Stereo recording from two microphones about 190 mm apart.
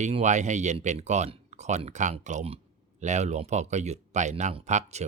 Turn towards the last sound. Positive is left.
turn(degrees=-35)  # may be behind; listen again after turning